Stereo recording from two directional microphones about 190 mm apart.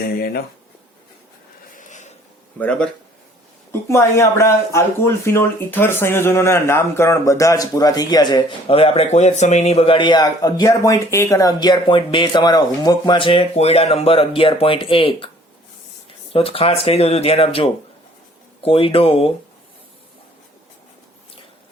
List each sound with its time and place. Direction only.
0.0 s speech: 55° left (ahead or behind)
1.7 s a sound: 40° left (ahead or behind)
2.6 s speech: 5° left (ahead or behind); by 15.3 s 30° left (ahead or behind)
16.3 s speech: 30° left (ahead or behind)